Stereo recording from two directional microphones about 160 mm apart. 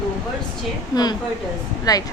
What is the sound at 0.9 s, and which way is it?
A woman's voice, 25° left (ahead or behind).